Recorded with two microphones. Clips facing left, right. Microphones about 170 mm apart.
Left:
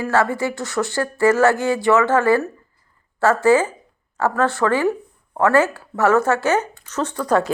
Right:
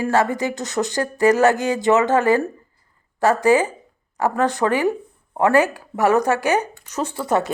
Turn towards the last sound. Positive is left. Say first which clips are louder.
# left 2 dB
turn(degrees=-25)  # may be behind; listen again after turning